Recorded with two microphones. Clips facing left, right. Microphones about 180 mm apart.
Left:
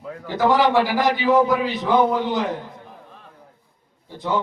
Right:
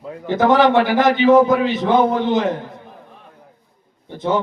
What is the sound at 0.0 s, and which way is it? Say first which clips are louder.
A man's voice: right 4 dB; 20° right (ahead or behind).